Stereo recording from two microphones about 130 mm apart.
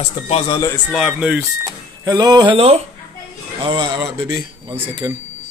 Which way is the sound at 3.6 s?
40° right (ahead or behind).